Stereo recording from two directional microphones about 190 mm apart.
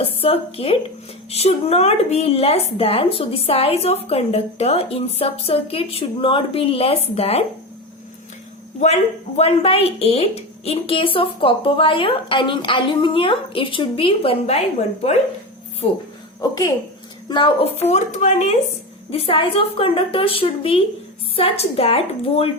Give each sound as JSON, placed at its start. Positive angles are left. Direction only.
{"t": 0.0, "sound": "a woman's voice", "side_deg": 30}
{"t": 8.8, "sound": "speech", "side_deg": 35}
{"t": 16.4, "sound": "a woman's voice", "side_deg": 20}